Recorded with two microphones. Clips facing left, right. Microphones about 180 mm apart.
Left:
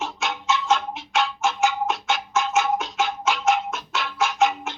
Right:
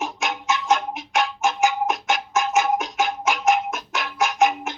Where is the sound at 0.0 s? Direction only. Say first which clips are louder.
Right 1 dB; 15° right (ahead or behind).